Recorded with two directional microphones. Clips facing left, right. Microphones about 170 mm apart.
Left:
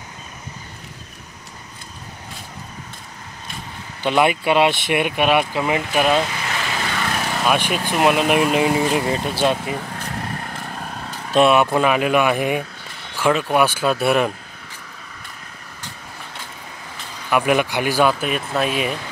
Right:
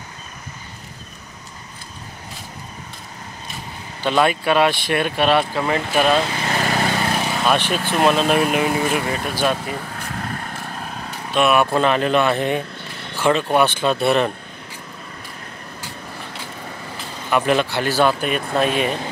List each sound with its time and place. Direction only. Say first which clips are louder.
4.0 s speech: even; 20° left (ahead or behind)
6.3 s vehicle: right 5 dB; 35° right (ahead or behind)
7.4 s speech: even; 10° left (ahead or behind)
10.5 s vehicle: even; centre (ahead or behind)
11.5 s speech: even; 15° left (ahead or behind)
17.3 s speech: even; 10° left (ahead or behind)